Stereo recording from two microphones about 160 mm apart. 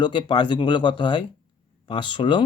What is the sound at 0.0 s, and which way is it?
Speech, 30° left (ahead or behind).